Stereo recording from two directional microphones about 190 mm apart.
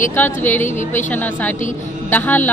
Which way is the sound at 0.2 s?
10° left (ahead or behind).